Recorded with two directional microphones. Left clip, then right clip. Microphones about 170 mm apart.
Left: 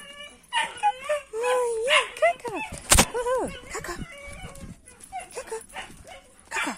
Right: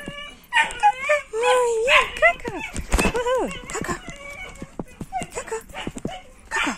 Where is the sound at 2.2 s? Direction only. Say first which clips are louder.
Right 5 dB; 15° left (ahead or behind).